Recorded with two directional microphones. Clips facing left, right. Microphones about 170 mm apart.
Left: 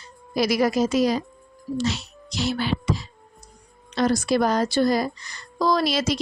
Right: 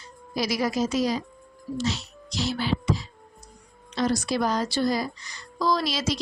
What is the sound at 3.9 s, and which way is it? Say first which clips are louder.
Speech: left 4 dB; 55° left (ahead or behind).